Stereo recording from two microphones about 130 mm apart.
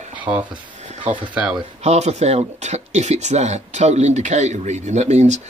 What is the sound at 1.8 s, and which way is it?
Speech, 60° right (ahead or behind).